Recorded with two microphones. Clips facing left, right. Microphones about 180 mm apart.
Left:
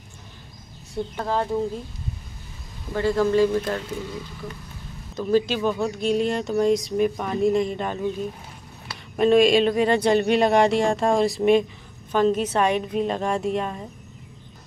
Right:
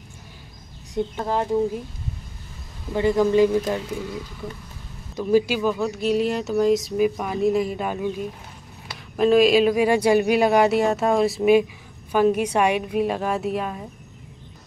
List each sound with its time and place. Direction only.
0.9 s a woman's voice: 15° right (ahead or behind)
2.9 s a woman's voice: 15° right (ahead or behind)
5.1 s speech: 10° right (ahead or behind)
9.1 s a woman's voice: centre (ahead or behind)